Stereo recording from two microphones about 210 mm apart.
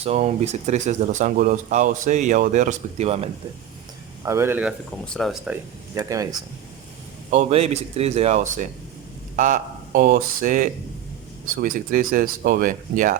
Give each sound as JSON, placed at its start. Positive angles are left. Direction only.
{"t": 0.0, "sound": "speech", "side_deg": -30}
{"t": 4.2, "sound": "speech", "side_deg": -15}
{"t": 4.9, "sound": "speech", "side_deg": 5}
{"t": 5.9, "sound": "speech", "side_deg": -15}
{"t": 7.3, "sound": "speech", "side_deg": -30}